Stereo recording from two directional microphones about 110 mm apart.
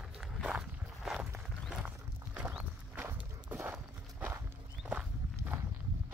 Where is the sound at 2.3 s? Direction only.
15° right (ahead or behind).